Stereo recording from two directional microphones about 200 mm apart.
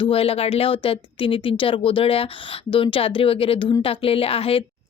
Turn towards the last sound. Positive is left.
turn(degrees=30)  # may be behind; listen again after turning